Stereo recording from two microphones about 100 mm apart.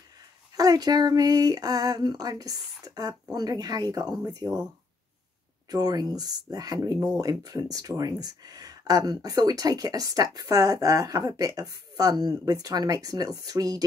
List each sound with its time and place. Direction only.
0.6 s speech: 40° right (ahead or behind)
5.7 s speech: 40° right (ahead or behind)